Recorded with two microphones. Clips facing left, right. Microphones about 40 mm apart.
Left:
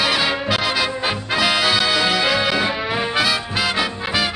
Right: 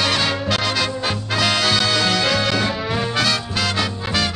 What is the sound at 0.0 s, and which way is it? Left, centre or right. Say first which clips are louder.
Music: left 1 dB; centre.